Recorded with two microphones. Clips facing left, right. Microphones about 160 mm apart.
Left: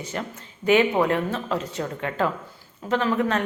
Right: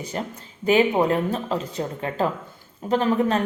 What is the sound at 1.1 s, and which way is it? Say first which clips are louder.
Speech: right 1 dB; 35° right (ahead or behind).